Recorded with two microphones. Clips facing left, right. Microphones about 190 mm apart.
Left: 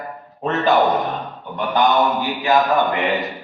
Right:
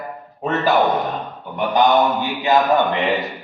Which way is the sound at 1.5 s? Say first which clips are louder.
Right 2 dB; 20° right (ahead or behind).